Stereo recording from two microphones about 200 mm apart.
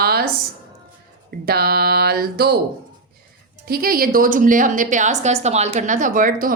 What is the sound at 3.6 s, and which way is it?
A woman's voice, 50° right (ahead or behind).